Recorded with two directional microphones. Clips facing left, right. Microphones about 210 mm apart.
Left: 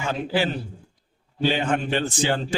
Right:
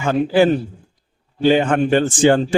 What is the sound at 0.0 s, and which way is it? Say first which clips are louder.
A man's voice: right 10 dB; 50° right (ahead or behind).